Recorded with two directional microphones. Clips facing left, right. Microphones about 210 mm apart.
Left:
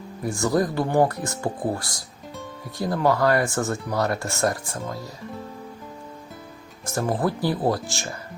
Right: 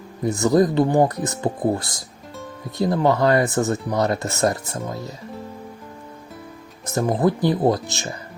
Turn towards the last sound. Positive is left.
turn(degrees=-20)  # may be behind; listen again after turning